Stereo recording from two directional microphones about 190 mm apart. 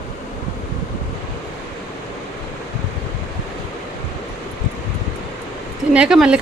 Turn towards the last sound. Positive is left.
turn(degrees=-5)  # may be behind; listen again after turning